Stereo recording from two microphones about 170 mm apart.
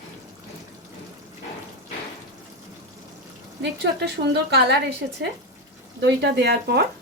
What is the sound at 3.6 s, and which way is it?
A woman's voice, 85° right.